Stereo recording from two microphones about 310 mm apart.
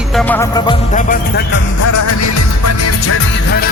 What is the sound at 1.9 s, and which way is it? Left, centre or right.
Music, left.